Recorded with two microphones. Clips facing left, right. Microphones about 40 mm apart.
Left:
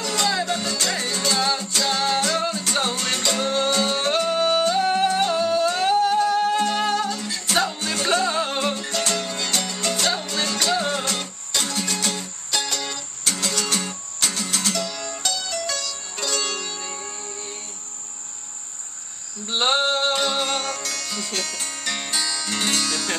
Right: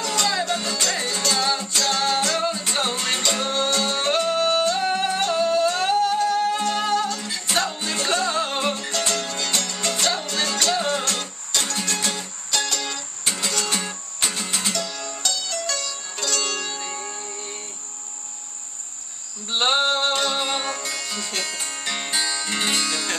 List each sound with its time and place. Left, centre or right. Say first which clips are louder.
0.0 s music: even; centre
7.2 s music: left 1 dB; centre
12.5 s music: right 1 dB; centre
13.4 s music: even; centre
14.7 s music: left 1 dB; centre
16.6 s music: right 2 dB; centre
19.5 s music: even; centre